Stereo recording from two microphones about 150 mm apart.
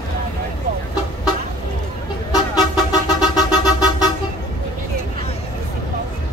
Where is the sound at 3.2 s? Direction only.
25° left (ahead or behind).